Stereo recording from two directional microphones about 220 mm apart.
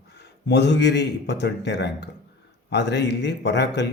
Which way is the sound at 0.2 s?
50° left (ahead or behind).